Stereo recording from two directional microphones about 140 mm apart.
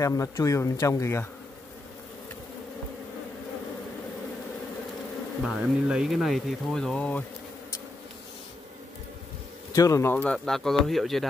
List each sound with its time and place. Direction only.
0.0 s speech: 25° left (ahead or behind)
5.4 s speech: 5° right (ahead or behind)
9.8 s speech: 25° left (ahead or behind)
10.1 s speech: 10° left (ahead or behind)